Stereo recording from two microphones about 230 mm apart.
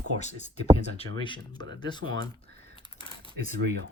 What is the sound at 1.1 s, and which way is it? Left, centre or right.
Speech, left.